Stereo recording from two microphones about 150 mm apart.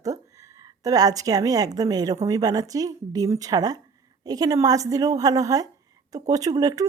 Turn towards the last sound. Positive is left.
turn(degrees=-25)  # may be behind; listen again after turning